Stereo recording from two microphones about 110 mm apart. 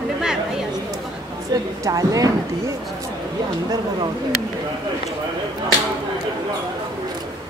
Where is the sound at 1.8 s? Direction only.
30° right (ahead or behind).